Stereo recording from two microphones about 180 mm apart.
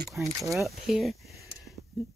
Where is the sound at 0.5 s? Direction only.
Centre (ahead or behind).